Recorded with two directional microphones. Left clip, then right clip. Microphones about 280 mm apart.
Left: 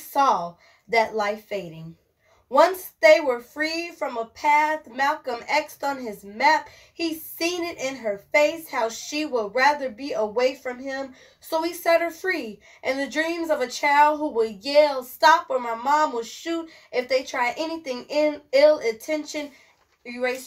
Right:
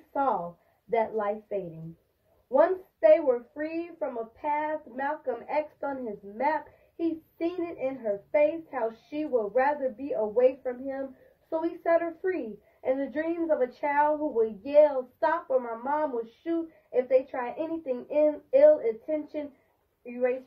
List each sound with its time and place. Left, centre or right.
0.8 s a woman's voice: left
7.6 s a woman's voice: left